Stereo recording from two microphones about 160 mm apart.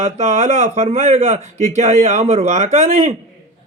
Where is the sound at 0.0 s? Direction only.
45° right (ahead or behind).